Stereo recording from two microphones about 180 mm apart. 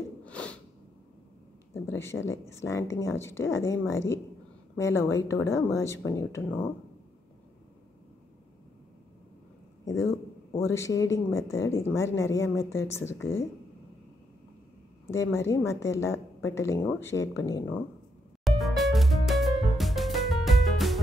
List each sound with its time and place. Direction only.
0.2 s sneeze: 5° left (ahead or behind)
1.7 s speech: 15° left (ahead or behind)
9.8 s speech: 15° left (ahead or behind)
15.0 s speech: 15° left (ahead or behind)
18.4 s music: centre (ahead or behind)